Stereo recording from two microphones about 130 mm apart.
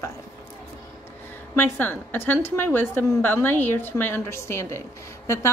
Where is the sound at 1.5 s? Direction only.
15° left (ahead or behind).